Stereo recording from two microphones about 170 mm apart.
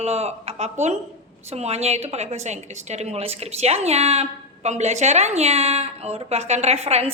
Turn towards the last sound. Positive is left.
turn(degrees=-35)  # may be behind; listen again after turning